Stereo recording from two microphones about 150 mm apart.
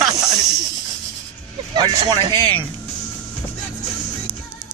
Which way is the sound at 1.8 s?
30° right (ahead or behind).